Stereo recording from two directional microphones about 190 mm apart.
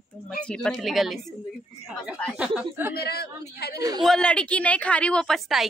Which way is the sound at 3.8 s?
20° right (ahead or behind).